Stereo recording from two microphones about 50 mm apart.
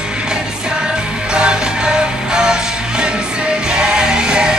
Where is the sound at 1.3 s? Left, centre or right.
Centre.